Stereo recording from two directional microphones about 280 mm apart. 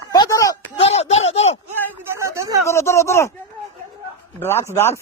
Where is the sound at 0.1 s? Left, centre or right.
Centre.